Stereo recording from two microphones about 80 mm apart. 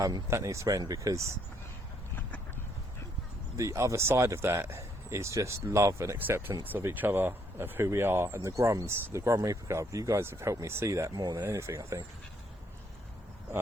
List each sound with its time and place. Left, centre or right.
0.3 s speech: right
3.6 s speech: right
6.1 s speech: right
11.1 s speech: right
11.4 s speech: right